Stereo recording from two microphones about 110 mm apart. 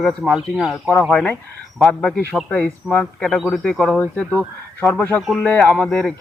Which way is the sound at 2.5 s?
15° left (ahead or behind).